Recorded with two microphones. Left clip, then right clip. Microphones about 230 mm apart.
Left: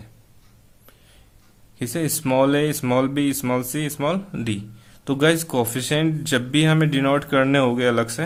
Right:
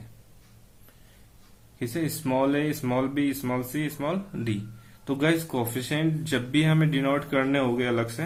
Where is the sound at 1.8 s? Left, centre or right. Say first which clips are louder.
Left 5 dB; left.